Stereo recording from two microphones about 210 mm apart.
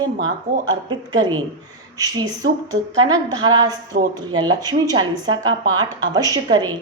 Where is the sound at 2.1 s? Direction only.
15° right (ahead or behind).